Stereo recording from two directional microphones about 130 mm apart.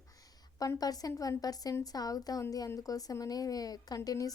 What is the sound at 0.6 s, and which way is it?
A woman's voice, 30° left (ahead or behind).